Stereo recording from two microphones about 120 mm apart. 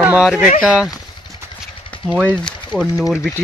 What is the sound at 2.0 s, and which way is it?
Speech, 5° right (ahead or behind).